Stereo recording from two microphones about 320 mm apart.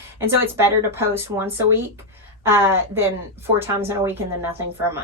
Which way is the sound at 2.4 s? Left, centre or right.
Centre.